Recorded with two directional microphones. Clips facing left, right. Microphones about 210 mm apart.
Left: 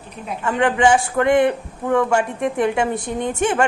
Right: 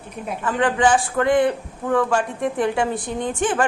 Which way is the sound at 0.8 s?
15° left (ahead or behind).